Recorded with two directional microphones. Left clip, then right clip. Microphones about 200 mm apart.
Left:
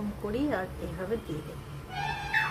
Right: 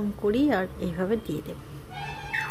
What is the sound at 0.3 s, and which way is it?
Speech, 45° right (ahead or behind).